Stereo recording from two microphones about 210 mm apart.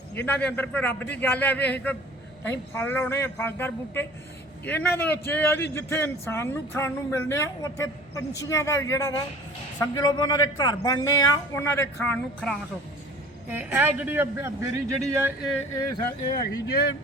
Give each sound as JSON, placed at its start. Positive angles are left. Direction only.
{"t": 0.3, "sound": "a man's voice", "side_deg": 5}
{"t": 13.5, "sound": "speech", "side_deg": -10}
{"t": 16.3, "sound": "speech", "side_deg": 50}